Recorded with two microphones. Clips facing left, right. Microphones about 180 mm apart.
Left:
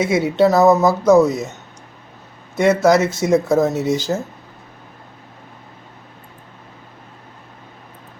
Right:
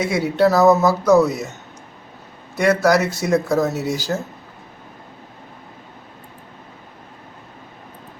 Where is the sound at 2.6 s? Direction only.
20° left (ahead or behind).